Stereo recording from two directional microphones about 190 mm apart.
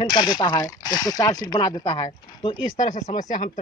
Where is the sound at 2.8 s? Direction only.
40° left (ahead or behind).